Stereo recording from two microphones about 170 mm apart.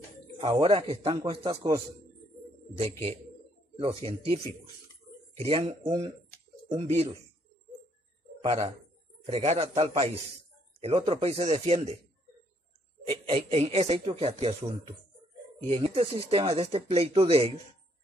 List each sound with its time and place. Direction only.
0.4 s speech: 30° right (ahead or behind)
1.4 s speech: 25° right (ahead or behind)
3.7 s speech: 35° right (ahead or behind)
5.9 s speech: 20° right (ahead or behind)
6.8 s speech: 35° right (ahead or behind)
8.5 s speech: 35° right (ahead or behind)
13.3 s speech: 35° right (ahead or behind)
15.7 s speech: 35° right (ahead or behind)